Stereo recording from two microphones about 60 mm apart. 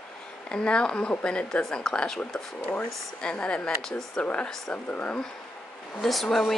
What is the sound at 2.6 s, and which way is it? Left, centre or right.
Speech, left.